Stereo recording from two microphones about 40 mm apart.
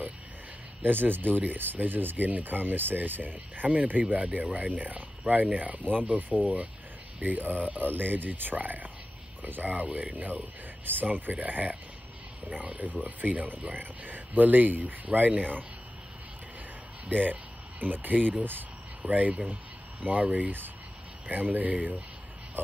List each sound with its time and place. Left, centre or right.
0.8 s speech: right
3.6 s speech: right
7.9 s speech: right
17.1 s speech: right
19.0 s speech: right